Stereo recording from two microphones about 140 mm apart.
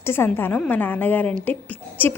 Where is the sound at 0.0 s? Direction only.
15° left (ahead or behind).